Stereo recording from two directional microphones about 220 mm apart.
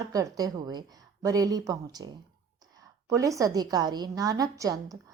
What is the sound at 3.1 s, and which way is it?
A woman's voice, 15° right (ahead or behind).